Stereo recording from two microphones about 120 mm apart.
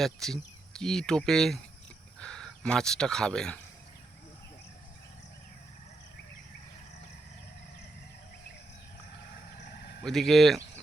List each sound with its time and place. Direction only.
0.0 s speech: 5° left (ahead or behind)
10.0 s speech: centre (ahead or behind)